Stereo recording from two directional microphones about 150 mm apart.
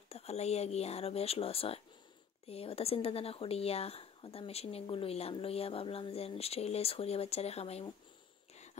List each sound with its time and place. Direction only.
0.1 s speech: 45° left (ahead or behind)